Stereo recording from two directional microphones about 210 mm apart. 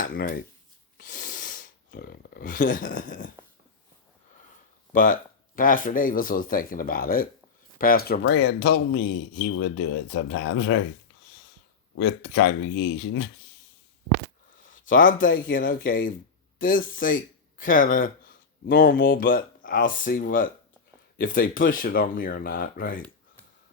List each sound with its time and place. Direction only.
0.0 s speech: 45° left (ahead or behind)
0.9 s a sound: 40° left (ahead or behind)
1.9 s speech: 50° left (ahead or behind)
4.9 s speech: 40° left (ahead or behind); by 10.8 s 70° left (ahead or behind)
11.9 s speech: 55° left (ahead or behind)
14.6 s speech: 40° left (ahead or behind)
18.6 s speech: 55° left (ahead or behind)